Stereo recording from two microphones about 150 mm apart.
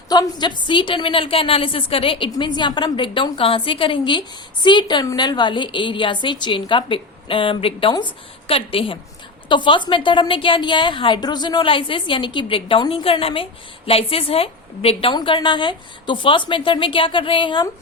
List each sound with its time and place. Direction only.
0.1 s a woman's voice: 30° left (ahead or behind)